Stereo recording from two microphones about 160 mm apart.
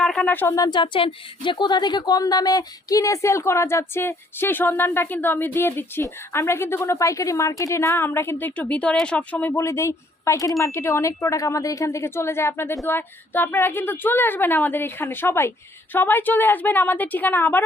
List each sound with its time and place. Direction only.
0.0 s a woman's voice: 5° left (ahead or behind)